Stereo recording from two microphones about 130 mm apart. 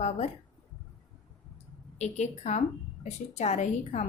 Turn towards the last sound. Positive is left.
turn(degrees=65)  # may be behind; listen again after turning